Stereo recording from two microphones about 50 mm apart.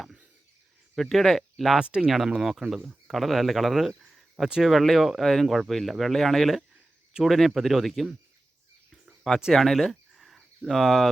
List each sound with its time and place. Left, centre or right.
0.9 s speech: centre
1.8 s speech: centre
2.0 s speech: centre
9.5 s speech: centre